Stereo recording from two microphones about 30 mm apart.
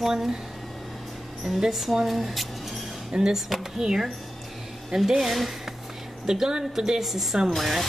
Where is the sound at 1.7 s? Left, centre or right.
Centre.